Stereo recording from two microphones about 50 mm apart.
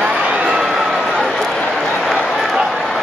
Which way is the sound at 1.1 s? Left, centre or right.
Centre.